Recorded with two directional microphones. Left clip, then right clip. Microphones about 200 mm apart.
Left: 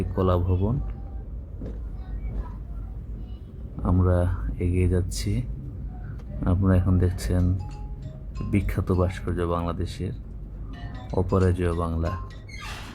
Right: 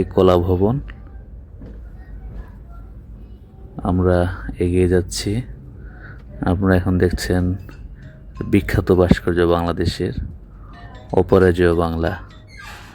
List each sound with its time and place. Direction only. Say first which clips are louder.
0.0 s speech: right 11 dB; 35° right (ahead or behind)
3.8 s speech: right 8 dB; 30° right (ahead or behind)
6.4 s speech: right 8 dB; 35° right (ahead or behind)
8.4 s speech: right 11 dB; 35° right (ahead or behind)